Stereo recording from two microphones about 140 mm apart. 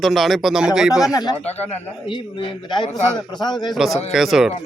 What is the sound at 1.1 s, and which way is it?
Speech, 30° left (ahead or behind).